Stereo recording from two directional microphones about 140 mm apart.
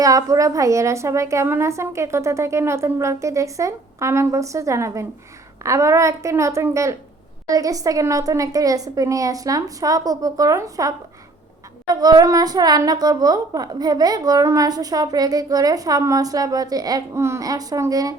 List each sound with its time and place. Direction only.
0.0 s a woman's voice: 25° right (ahead or behind)
11.9 s a woman's voice: 25° right (ahead or behind)